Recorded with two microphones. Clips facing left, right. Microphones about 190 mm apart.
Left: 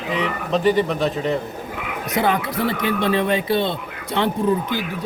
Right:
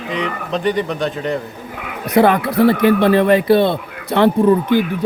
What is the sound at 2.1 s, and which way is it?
Speech, 60° right (ahead or behind).